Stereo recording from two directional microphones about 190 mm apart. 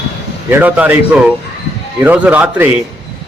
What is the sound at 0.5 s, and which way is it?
Speech, 10° right (ahead or behind).